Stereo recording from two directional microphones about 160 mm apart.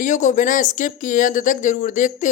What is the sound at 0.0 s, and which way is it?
Speech, 50° left (ahead or behind).